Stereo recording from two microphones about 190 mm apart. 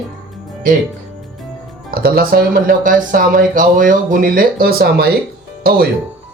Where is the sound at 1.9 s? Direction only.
55° right (ahead or behind).